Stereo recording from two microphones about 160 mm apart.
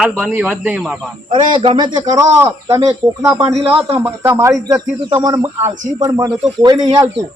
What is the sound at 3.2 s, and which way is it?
A man's voice, 5° right (ahead or behind).